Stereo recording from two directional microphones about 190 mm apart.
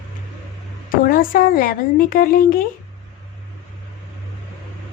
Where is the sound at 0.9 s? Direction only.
50° left (ahead or behind).